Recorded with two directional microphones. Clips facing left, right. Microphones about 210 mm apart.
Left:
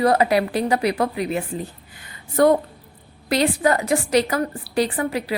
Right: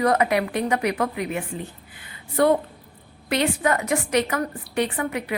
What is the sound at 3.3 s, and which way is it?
A woman's voice, 35° left (ahead or behind).